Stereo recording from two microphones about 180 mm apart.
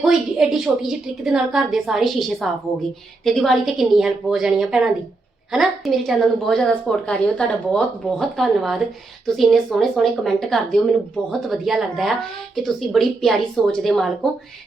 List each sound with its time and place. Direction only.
0.0 s a woman's voice: centre (ahead or behind)